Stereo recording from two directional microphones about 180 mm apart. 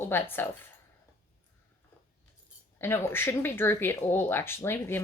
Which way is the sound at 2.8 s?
15° left (ahead or behind).